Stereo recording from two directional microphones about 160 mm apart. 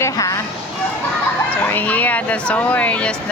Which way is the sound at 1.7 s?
10° left (ahead or behind).